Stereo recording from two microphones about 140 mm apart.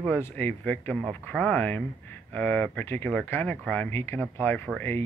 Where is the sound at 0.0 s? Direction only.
15° left (ahead or behind).